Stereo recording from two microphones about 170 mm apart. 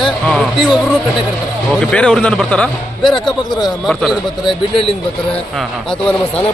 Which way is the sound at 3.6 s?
Centre (ahead or behind).